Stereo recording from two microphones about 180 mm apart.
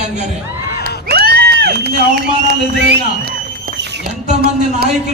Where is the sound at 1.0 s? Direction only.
60° right (ahead or behind).